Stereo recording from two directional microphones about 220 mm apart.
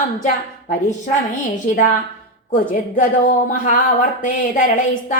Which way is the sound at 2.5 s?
40° left (ahead or behind).